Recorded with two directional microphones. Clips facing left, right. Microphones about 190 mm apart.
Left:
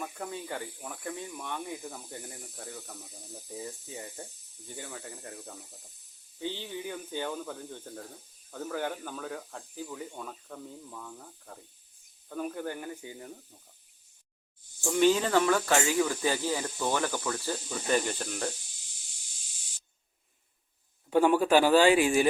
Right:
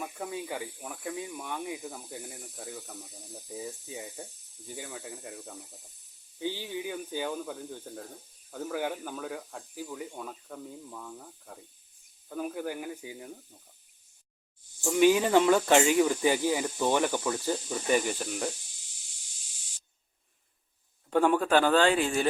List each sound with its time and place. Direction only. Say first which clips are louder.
0.0 s speech: right 2 dB; 5° right (ahead or behind)
14.8 s speech: right 2 dB; 5° right (ahead or behind)
21.1 s a man's voice: left 1 dB; 5° left (ahead or behind)